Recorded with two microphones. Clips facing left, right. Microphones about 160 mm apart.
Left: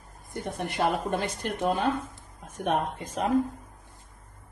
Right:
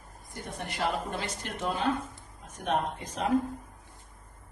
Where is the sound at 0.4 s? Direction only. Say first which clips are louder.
Left 5 dB; 55° left (ahead or behind).